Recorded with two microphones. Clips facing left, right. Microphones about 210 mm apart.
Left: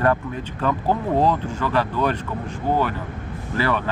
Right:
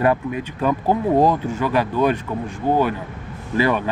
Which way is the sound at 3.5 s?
15° right (ahead or behind).